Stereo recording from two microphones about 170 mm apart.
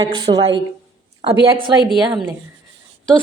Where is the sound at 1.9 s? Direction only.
Centre (ahead or behind).